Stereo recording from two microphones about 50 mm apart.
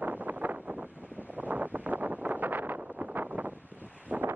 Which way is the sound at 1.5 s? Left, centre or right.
Right.